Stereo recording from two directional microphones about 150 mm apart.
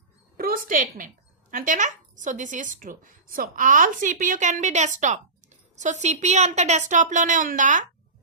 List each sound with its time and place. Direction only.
0.3 s a woman's voice: 75° right (ahead or behind); by 7.9 s 55° right (ahead or behind)